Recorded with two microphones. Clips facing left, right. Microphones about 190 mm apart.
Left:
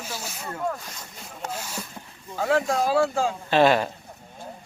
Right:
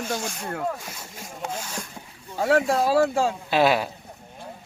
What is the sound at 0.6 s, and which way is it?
Speech, 5° right (ahead or behind).